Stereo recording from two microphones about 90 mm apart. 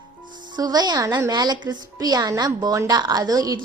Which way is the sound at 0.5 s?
50° right (ahead or behind).